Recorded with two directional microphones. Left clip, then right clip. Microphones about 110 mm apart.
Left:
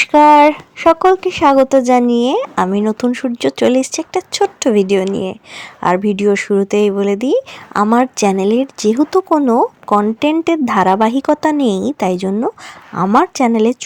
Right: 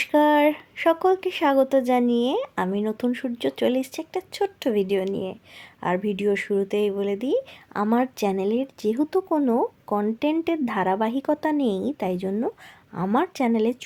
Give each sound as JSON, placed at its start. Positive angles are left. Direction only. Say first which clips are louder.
{"t": 0.0, "sound": "speech", "louder": "left 11 dB", "side_deg": 45}